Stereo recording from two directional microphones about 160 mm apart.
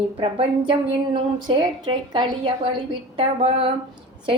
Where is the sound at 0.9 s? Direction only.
30° right (ahead or behind).